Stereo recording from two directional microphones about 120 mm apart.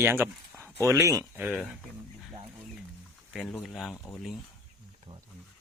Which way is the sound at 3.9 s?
20° left (ahead or behind).